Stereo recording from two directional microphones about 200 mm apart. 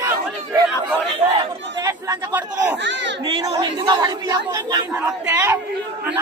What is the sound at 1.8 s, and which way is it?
Chatter, 15° right (ahead or behind).